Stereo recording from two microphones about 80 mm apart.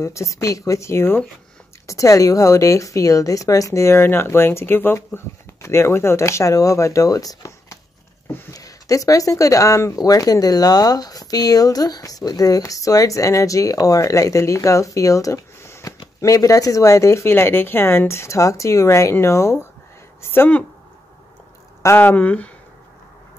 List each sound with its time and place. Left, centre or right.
0.0 s speech: left
1.9 s speech: left
20.2 s a sound: left
21.8 s speech: left